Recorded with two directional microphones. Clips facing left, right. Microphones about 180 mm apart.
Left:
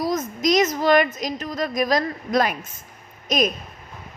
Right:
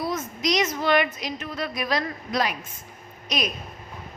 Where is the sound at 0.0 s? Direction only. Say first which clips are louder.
Left 5 dB; 40° left (ahead or behind).